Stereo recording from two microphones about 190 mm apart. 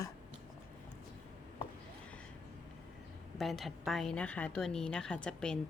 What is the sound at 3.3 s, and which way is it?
A woman's voice, centre (ahead or behind).